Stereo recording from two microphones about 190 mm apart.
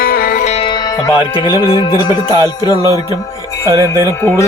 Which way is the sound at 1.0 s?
20° left (ahead or behind).